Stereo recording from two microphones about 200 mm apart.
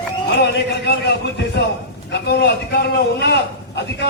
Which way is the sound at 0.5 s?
55° left (ahead or behind).